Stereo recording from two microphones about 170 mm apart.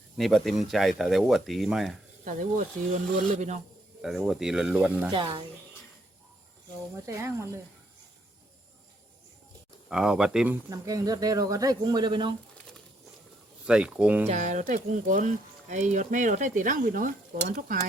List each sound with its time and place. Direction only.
0.2 s speech: centre (ahead or behind)
2.2 s speech: 45° right (ahead or behind)
4.0 s speech: centre (ahead or behind)
5.1 s speech: 30° right (ahead or behind)
6.9 s speech: 20° right (ahead or behind)
9.9 s speech: 5° right (ahead or behind); by 12.3 s 25° right (ahead or behind)
13.7 s speech: 5° right (ahead or behind)
14.3 s speech: 45° right (ahead or behind)